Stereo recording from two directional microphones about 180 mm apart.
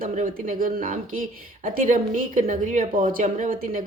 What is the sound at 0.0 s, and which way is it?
A woman's voice, 45° right (ahead or behind).